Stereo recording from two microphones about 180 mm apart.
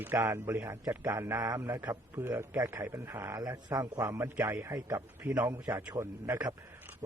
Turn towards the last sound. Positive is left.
turn(degrees=-15)  # may be behind; listen again after turning